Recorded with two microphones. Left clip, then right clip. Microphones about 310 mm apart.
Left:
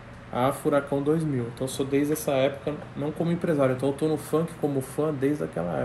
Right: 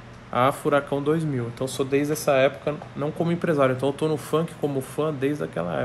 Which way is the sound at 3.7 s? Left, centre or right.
Centre.